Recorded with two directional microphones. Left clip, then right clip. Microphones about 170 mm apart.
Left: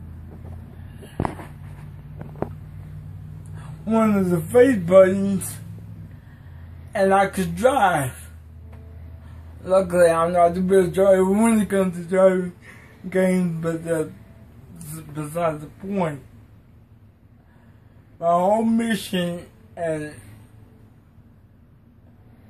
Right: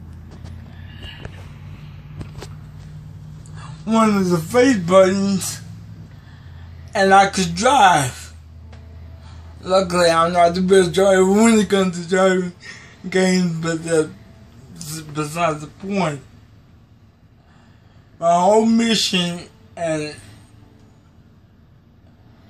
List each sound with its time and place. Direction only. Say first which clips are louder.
3.8 s speech: right 3 dB; 20° left (ahead or behind)
6.9 s speech: right 5 dB; 15° left (ahead or behind)
9.6 s speech: even; 15° left (ahead or behind)
15.1 s speech: right 4 dB; 10° left (ahead or behind)
18.2 s speech: right 5 dB; 10° left (ahead or behind)